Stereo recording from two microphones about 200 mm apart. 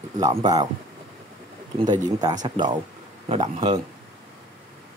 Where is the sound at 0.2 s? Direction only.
20° right (ahead or behind).